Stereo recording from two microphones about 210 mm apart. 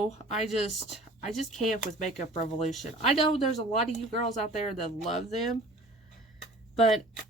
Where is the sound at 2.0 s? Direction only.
35° left (ahead or behind).